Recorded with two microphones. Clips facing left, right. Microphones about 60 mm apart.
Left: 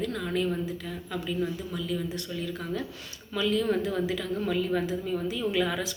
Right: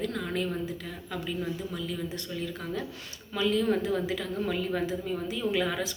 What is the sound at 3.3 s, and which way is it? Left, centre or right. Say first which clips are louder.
A woman's voice: even; right.